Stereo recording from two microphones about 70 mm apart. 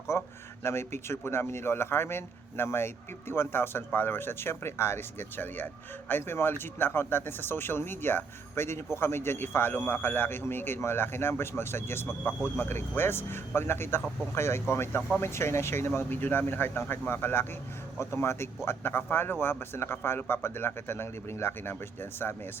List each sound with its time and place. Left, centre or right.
0.1 s speech: left